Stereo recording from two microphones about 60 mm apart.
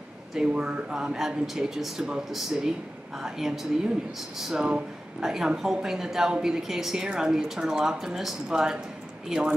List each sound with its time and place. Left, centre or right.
0.3 s speech: centre